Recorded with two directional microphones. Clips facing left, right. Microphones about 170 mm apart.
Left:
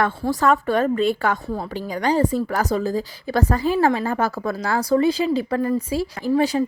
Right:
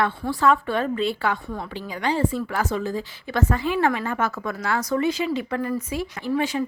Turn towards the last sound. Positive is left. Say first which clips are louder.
# left 5 dB
turn(degrees=35)  # may be behind; listen again after turning